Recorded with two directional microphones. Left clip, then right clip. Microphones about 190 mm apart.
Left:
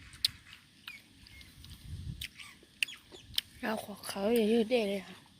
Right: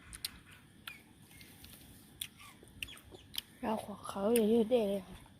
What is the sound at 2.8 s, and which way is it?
Chicken, 10° left (ahead or behind).